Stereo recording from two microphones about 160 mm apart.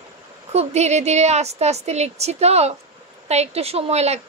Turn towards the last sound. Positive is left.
turn(degrees=-40)  # may be behind; listen again after turning